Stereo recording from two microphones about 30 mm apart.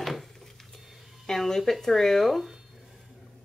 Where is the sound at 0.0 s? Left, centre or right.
Centre.